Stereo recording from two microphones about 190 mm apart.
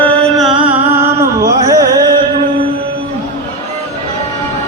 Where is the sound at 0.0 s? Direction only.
5° left (ahead or behind).